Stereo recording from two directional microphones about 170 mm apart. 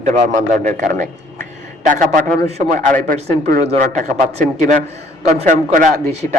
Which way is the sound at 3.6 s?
40° right (ahead or behind).